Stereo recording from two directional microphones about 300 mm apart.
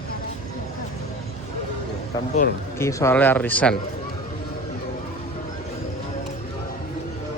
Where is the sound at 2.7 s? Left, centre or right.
Centre.